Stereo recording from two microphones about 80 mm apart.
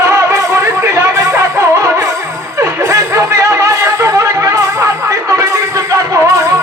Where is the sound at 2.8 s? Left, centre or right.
Right.